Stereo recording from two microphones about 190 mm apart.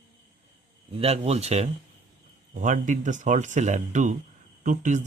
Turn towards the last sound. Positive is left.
turn(degrees=-40)  # may be behind; listen again after turning